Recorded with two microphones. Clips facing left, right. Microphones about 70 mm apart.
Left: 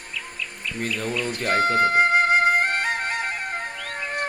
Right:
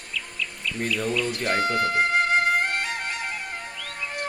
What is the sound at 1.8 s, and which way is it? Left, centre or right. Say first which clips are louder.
Music: left 4 dB; left.